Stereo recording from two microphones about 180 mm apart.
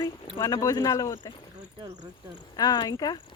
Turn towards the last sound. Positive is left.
turn(degrees=20)  # may be behind; listen again after turning